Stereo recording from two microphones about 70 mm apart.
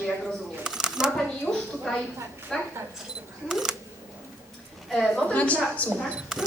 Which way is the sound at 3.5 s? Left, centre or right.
Centre.